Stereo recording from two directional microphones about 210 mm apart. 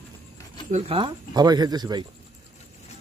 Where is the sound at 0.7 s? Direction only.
25° right (ahead or behind).